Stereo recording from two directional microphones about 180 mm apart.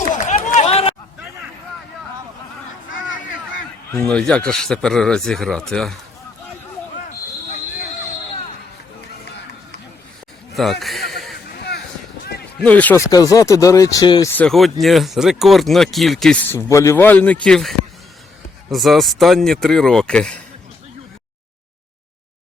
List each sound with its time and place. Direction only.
0.3 s run: 40° left (ahead or behind)
3.9 s speech: 5° left (ahead or behind)
10.5 s speech: centre (ahead or behind)
11.1 s a sound: centre (ahead or behind)
12.5 s speech: 5° left (ahead or behind)
13.1 s speech: 20° left (ahead or behind)
14.3 s speech: 5° left (ahead or behind)
16.5 s a man's voice: 15° left (ahead or behind)